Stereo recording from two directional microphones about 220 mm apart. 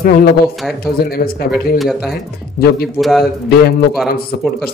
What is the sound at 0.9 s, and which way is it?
Speech, 45° left (ahead or behind).